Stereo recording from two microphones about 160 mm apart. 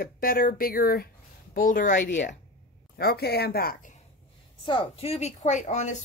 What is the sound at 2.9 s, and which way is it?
Speech, 80° left.